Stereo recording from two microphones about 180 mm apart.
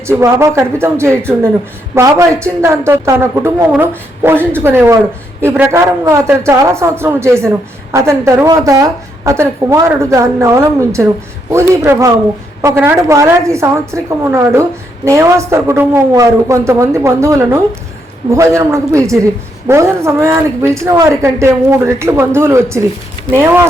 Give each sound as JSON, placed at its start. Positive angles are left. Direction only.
{"t": 0.1, "sound": "a woman's voice", "side_deg": -15}